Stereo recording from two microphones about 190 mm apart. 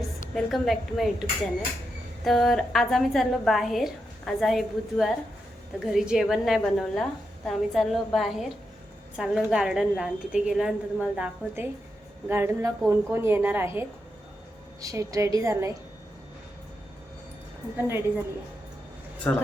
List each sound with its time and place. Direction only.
0.3 s a woman's voice: centre (ahead or behind); by 15.7 s 15° right (ahead or behind)
17.7 s a woman's voice: 10° right (ahead or behind)
19.3 s speech: 10° left (ahead or behind)